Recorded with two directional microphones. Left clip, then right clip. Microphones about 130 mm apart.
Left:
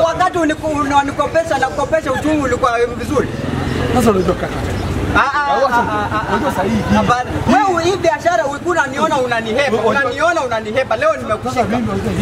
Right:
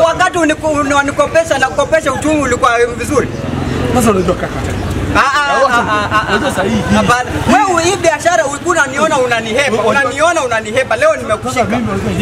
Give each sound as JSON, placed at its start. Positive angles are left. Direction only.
{"t": 0.0, "sound": "a man's voice", "side_deg": -15}
{"t": 3.9, "sound": "speech", "side_deg": 0}
{"t": 5.1, "sound": "a sound", "side_deg": -15}
{"t": 5.7, "sound": "a man's voice", "side_deg": -15}
{"t": 6.9, "sound": "a man's voice", "side_deg": -5}